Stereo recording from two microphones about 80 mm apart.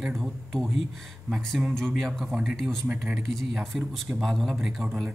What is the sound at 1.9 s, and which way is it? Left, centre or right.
Speech, centre.